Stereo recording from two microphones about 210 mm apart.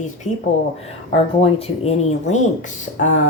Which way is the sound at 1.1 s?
30° left (ahead or behind).